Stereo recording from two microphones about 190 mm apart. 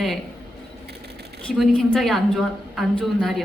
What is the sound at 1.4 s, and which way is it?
A woman's voice, 5° left (ahead or behind).